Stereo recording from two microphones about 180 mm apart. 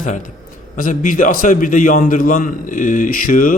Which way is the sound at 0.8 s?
45° left (ahead or behind).